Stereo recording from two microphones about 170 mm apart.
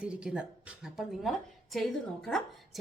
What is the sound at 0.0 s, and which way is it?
A woman's voice, 5° right (ahead or behind).